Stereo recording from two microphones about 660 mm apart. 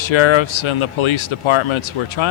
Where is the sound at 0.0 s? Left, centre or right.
Left.